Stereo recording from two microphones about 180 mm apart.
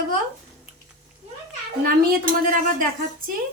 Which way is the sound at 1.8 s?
50° right (ahead or behind).